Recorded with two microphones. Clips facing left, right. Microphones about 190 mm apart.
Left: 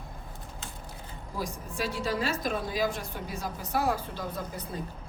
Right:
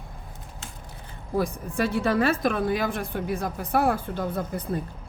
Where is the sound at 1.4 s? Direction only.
55° right (ahead or behind).